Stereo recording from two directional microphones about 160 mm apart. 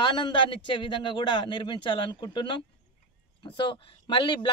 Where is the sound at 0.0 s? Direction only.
30° left (ahead or behind).